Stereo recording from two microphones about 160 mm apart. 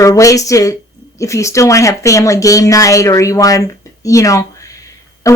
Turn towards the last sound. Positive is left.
turn(degrees=20)  # may be behind; listen again after turning